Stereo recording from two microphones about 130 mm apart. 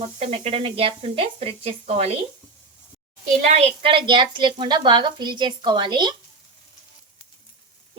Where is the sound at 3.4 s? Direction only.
55° right (ahead or behind); by 6.1 s 35° right (ahead or behind).